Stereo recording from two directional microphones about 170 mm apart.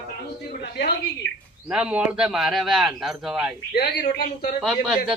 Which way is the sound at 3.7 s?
65° left (ahead or behind).